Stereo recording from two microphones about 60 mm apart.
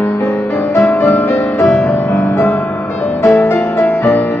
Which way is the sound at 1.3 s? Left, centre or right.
Left.